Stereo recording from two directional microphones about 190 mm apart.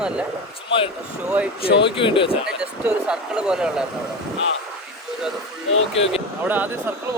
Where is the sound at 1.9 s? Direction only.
25° left (ahead or behind).